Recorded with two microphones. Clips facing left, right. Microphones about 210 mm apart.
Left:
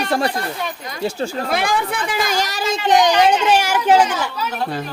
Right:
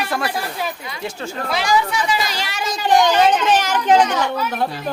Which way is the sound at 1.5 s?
55° left (ahead or behind).